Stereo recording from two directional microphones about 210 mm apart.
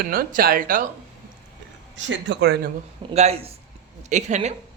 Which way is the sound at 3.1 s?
30° right (ahead or behind).